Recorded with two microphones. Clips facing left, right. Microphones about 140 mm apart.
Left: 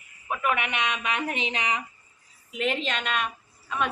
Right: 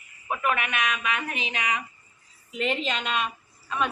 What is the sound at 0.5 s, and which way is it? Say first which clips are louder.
Speech: even; 25° left (ahead or behind).